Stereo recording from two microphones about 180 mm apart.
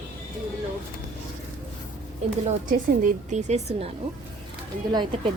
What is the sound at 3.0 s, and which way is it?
Speech, 40° right (ahead or behind).